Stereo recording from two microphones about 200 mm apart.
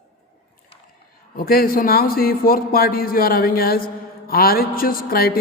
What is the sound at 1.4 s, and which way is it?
Speech, 45° left (ahead or behind).